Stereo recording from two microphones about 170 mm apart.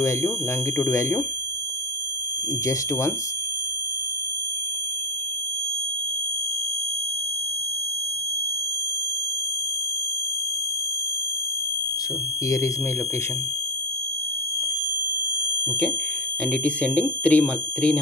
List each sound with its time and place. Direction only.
0.7 s speech: 15° left (ahead or behind)
12.4 s speech: 20° left (ahead or behind)
16.4 s speech: 5° left (ahead or behind)